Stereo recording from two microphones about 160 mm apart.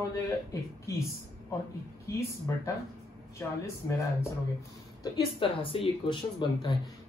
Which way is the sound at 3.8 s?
15° left (ahead or behind).